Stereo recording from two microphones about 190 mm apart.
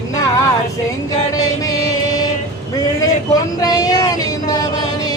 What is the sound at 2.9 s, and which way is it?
Vehicle, 20° left (ahead or behind).